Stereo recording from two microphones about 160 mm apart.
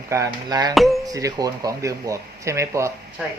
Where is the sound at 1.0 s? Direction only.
20° right (ahead or behind).